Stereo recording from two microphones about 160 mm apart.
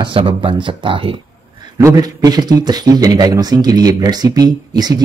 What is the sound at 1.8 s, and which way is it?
A man's voice, 20° right (ahead or behind).